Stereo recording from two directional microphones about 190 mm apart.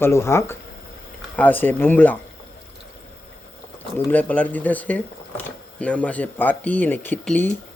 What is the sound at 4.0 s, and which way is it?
Speech, 10° left (ahead or behind).